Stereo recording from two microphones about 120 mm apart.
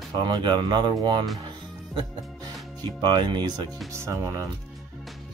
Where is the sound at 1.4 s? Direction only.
40° right (ahead or behind).